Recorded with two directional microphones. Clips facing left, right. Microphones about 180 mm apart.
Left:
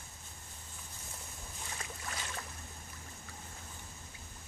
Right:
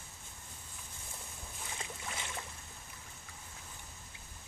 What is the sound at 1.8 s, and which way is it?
Boat, 20° right (ahead or behind).